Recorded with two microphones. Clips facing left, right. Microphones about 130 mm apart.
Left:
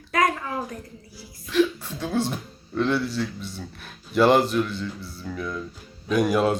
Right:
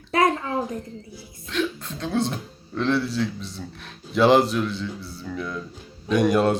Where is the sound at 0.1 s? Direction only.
30° right (ahead or behind).